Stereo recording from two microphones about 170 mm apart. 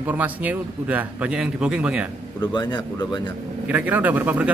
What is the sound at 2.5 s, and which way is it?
Speech, 25° left (ahead or behind).